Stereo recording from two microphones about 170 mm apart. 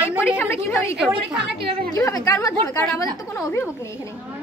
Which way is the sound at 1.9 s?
20° left (ahead or behind).